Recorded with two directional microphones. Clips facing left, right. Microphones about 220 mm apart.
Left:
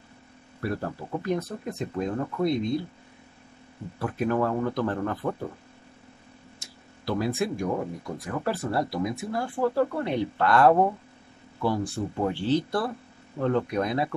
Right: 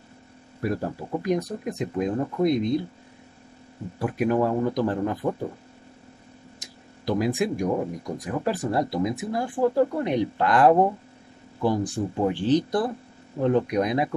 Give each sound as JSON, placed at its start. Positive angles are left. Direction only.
{"t": 0.6, "sound": "speech", "side_deg": -15}
{"t": 4.0, "sound": "speech", "side_deg": -15}
{"t": 6.6, "sound": "speech", "side_deg": -15}